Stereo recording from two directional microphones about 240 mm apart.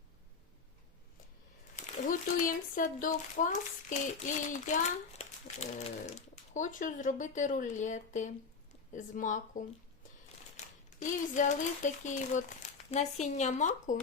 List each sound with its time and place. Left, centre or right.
2.0 s speech: left
10.8 s speech: left